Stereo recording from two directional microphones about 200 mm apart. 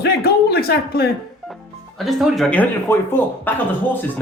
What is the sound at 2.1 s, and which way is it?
Speech, centre (ahead or behind).